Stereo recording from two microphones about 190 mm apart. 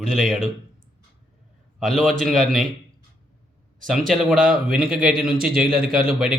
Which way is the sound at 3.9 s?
Centre (ahead or behind).